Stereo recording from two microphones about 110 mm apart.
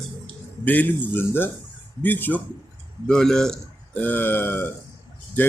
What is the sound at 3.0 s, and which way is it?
Speech, 5° left (ahead or behind).